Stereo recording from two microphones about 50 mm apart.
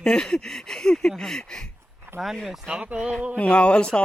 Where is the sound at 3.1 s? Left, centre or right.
Right.